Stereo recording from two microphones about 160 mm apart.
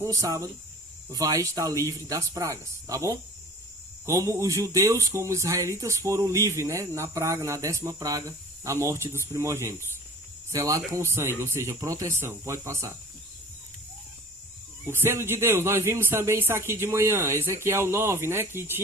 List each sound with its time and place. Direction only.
0.0 s speech: 20° right (ahead or behind)
14.8 s speech: 15° right (ahead or behind)